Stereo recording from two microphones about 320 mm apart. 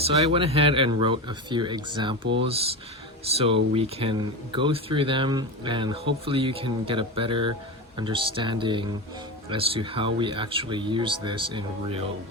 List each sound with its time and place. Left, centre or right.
0.0 s speech: centre
3.3 s speech: centre